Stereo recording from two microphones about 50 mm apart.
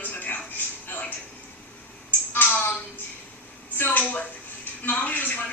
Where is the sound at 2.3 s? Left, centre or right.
Left.